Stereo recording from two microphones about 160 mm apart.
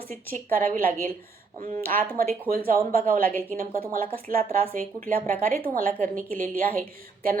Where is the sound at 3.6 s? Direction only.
55° right (ahead or behind).